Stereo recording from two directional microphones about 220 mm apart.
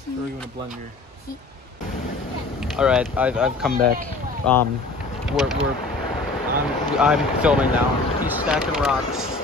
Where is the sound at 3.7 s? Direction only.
40° right (ahead or behind).